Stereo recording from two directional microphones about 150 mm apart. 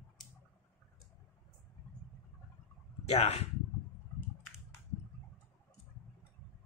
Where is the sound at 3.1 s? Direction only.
45° left (ahead or behind).